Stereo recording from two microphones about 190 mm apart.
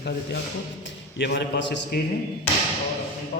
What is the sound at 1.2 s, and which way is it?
Speech, 65° left (ahead or behind).